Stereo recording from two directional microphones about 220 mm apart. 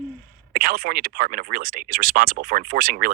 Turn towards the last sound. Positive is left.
turn(degrees=-40)  # may be behind; listen again after turning